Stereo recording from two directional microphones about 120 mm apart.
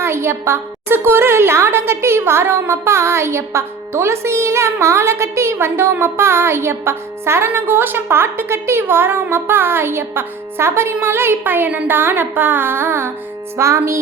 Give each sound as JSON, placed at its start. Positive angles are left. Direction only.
{"t": 0.0, "sound": "a woman's voice", "side_deg": -20}